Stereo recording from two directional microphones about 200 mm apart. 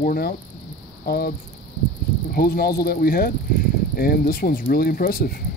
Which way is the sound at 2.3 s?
50° left (ahead or behind).